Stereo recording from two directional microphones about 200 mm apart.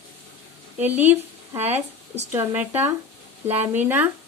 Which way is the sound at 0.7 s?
10° right (ahead or behind).